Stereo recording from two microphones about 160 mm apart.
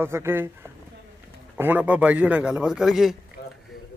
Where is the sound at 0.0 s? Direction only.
15° right (ahead or behind).